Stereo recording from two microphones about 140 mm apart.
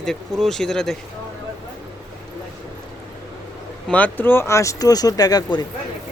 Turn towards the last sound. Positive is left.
turn(degrees=25)  # may be behind; listen again after turning